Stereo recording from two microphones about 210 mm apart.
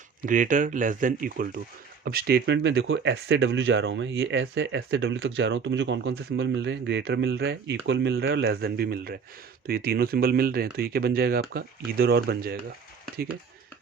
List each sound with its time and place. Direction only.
0.2 s speech: 40° right (ahead or behind)